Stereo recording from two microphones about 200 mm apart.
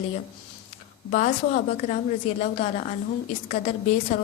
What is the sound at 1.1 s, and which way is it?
A woman's voice, 40° left (ahead or behind).